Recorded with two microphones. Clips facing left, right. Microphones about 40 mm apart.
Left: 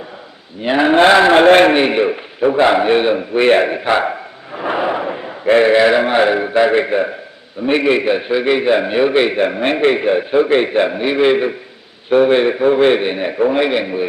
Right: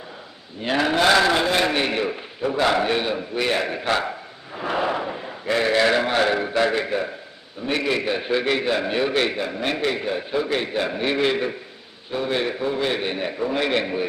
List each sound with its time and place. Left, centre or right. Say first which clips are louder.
0.6 s a man's voice: left 8 dB; left
1.4 s a man's voice: left 12 dB; left
1.8 s a man's voice: left 9 dB; left
3.8 s a sound: left 7 dB; left
5.5 s a man's voice: left 9 dB; left
8.2 s a man's voice: left 7 dB; centre
9.3 s a man's voice: left 9 dB; left
10.9 s a man's voice: left 8 dB; centre
12.1 s a man's voice: left 13 dB; left
12.4 s a man's voice: left 11 dB; left; by 14.0 s centre